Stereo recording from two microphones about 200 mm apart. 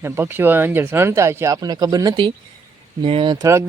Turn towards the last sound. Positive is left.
turn(degrees=-15)  # may be behind; listen again after turning